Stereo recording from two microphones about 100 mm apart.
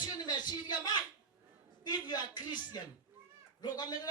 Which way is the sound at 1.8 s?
45° left (ahead or behind).